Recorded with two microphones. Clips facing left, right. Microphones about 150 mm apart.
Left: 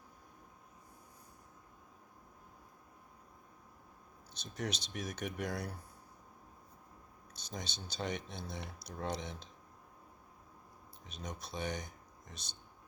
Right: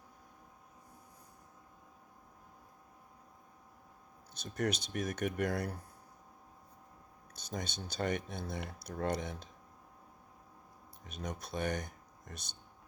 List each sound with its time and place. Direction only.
4.5 s speech: 55° right (ahead or behind)
7.3 s speech: 55° right (ahead or behind)
11.0 s speech: 55° right (ahead or behind)